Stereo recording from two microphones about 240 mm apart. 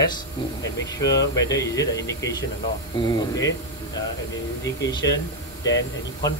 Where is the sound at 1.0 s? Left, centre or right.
Centre.